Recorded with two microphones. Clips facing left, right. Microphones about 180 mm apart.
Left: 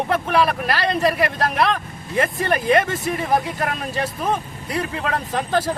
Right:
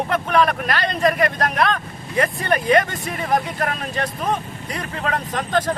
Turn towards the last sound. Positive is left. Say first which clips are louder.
# even
turn(degrees=5)  # may be behind; listen again after turning